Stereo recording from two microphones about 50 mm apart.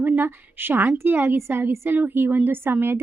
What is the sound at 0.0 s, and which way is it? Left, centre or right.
A woman's voice, right.